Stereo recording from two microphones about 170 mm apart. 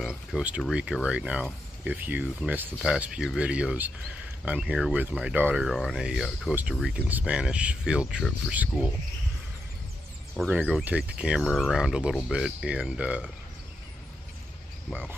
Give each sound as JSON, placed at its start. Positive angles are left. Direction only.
{"t": 0.3, "sound": "speech", "side_deg": -5}
{"t": 5.7, "sound": "speech", "side_deg": 0}
{"t": 10.3, "sound": "speech", "side_deg": 0}
{"t": 14.9, "sound": "speech", "side_deg": -10}